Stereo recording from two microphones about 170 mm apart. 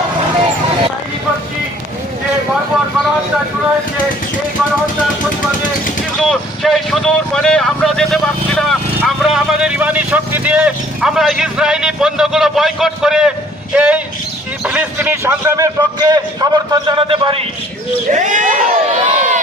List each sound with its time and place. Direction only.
6.2 s vehicle: centre (ahead or behind)
13.7 s a man's voice: 10° right (ahead or behind); by 17.4 s 30° right (ahead or behind)
18.1 s crowd: 45° right (ahead or behind)